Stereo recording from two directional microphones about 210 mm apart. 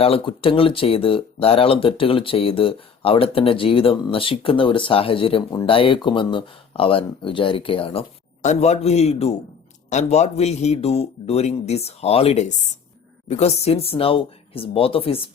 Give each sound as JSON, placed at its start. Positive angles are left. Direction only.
{"t": 0.0, "sound": "speech", "side_deg": 25}